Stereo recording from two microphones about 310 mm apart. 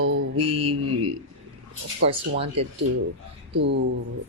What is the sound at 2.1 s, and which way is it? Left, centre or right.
Speech, centre.